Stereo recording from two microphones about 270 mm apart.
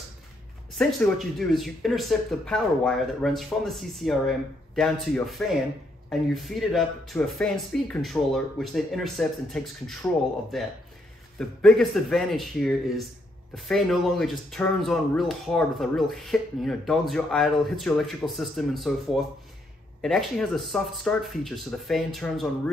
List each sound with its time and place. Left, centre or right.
0.7 s speech: centre
11.3 s speech: centre